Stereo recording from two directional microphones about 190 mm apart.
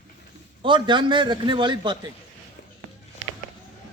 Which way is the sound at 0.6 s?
25° right (ahead or behind).